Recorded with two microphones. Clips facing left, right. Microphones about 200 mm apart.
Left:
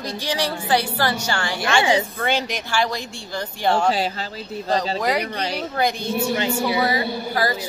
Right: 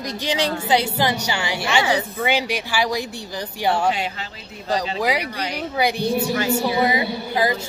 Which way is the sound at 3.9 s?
35° left (ahead or behind).